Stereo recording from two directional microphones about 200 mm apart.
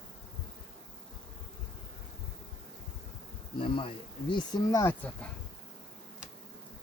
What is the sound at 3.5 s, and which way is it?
Speech, 25° left (ahead or behind).